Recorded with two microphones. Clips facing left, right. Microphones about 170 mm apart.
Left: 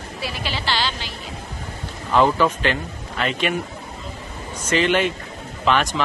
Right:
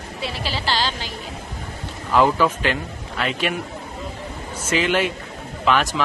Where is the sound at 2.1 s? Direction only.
5° right (ahead or behind).